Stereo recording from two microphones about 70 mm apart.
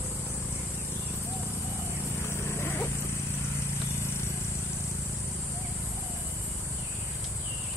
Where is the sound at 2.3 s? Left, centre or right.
Left.